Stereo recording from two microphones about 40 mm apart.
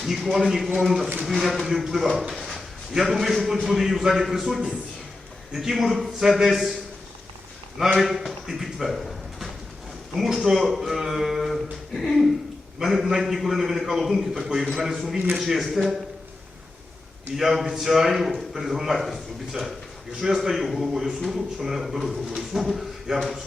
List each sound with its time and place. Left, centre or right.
0.0 s a man's voice: centre
2.3 s a sound: centre
2.9 s a man's voice: centre
7.9 s a man's voice: centre
12.8 s a man's voice: centre
17.3 s a man's voice: centre
20.1 s a man's voice: centre